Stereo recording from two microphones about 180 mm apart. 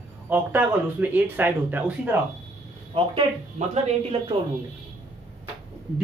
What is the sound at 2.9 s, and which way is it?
A woman's voice, 30° right (ahead or behind).